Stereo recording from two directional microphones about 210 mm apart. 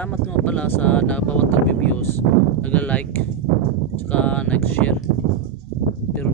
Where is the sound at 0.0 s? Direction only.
5° left (ahead or behind).